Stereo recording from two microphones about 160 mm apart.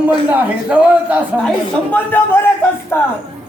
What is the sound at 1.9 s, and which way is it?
A man's voice, 15° left (ahead or behind).